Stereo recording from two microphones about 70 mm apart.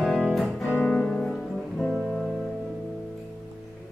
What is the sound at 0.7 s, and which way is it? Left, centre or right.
Music, left.